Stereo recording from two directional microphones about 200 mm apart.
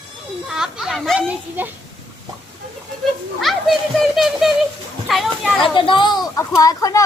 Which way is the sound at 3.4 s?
Centre (ahead or behind).